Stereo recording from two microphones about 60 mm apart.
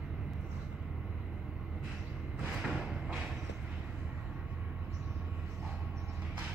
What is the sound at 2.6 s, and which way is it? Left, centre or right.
Music, centre.